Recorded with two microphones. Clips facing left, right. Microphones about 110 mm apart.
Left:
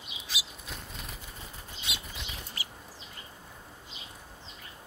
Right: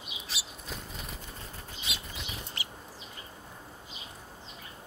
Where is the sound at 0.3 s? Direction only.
Centre (ahead or behind).